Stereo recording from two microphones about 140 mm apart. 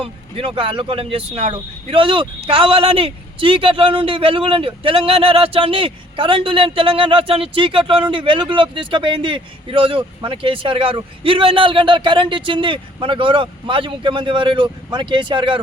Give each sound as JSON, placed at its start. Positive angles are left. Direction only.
{"t": 0.0, "sound": "speech", "side_deg": -40}